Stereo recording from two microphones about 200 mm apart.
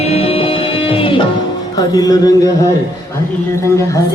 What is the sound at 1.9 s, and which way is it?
Speech, 20° left (ahead or behind).